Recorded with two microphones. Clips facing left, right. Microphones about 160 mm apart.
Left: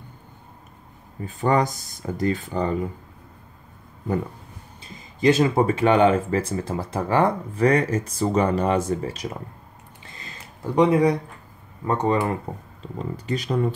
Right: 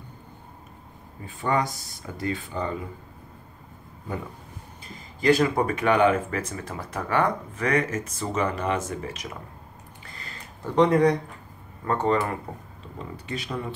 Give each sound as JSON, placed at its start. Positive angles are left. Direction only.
{"t": 1.2, "sound": "speech", "side_deg": 40}
{"t": 5.2, "sound": "speech", "side_deg": 20}
{"t": 10.0, "sound": "a sound", "side_deg": 20}
{"t": 10.8, "sound": "speech", "side_deg": 10}
{"t": 13.3, "sound": "speech", "side_deg": 40}